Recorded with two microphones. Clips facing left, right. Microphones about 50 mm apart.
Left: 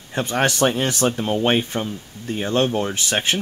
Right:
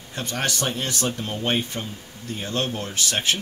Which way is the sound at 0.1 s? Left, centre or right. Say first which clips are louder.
Left 7 dB; left.